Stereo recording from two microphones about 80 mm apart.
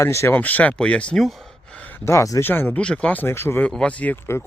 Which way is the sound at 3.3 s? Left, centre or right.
Left.